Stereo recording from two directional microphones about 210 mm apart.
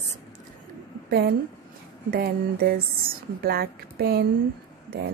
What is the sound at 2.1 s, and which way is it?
A woman's voice, 45° right (ahead or behind).